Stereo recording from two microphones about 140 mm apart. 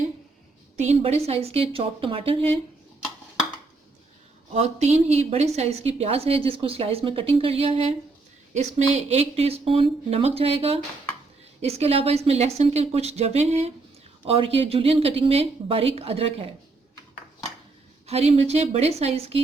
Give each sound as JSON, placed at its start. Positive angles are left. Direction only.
{"t": 0.8, "sound": "a woman's voice", "side_deg": -50}
{"t": 4.5, "sound": "a woman's voice", "side_deg": -50}
{"t": 8.5, "sound": "a woman's voice", "side_deg": -55}
{"t": 18.0, "sound": "a woman's voice", "side_deg": -50}